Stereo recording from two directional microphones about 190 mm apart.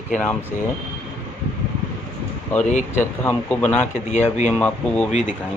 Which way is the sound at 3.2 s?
10° left (ahead or behind).